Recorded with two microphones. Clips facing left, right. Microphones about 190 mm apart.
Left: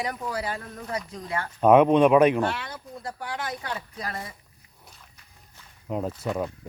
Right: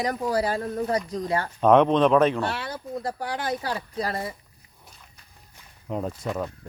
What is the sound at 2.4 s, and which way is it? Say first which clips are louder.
Speech: even; 35° right (ahead or behind).